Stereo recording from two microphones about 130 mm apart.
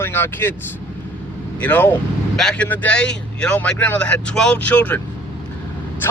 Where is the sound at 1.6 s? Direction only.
15° left (ahead or behind).